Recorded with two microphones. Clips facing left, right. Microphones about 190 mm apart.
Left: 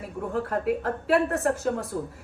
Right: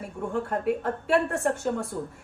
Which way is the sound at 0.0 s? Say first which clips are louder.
Even; centre (ahead or behind).